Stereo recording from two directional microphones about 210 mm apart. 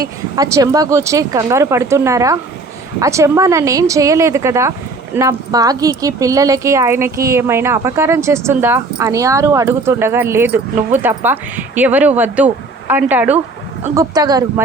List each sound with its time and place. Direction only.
0.3 s speech: 15° right (ahead or behind)